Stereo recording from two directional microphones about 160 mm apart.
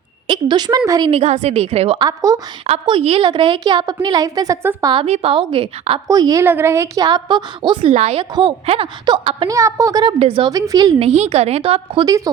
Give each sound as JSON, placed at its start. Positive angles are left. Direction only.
{"t": 0.3, "sound": "a woman's voice", "side_deg": -30}
{"t": 1.1, "sound": "a woman's voice", "side_deg": -40}
{"t": 2.0, "sound": "a woman's voice", "side_deg": -20}
{"t": 2.6, "sound": "a woman's voice", "side_deg": -35}
{"t": 4.9, "sound": "a woman's voice", "side_deg": -35}
{"t": 6.1, "sound": "a woman's voice", "side_deg": -25}
{"t": 9.5, "sound": "a woman's voice", "side_deg": -20}
{"t": 10.5, "sound": "a woman's voice", "side_deg": -20}
{"t": 11.0, "sound": "a woman's voice", "side_deg": -45}
{"t": 12.0, "sound": "a woman's voice", "side_deg": -20}